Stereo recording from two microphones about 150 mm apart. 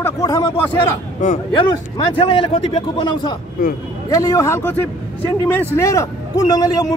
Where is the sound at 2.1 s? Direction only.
35° left (ahead or behind).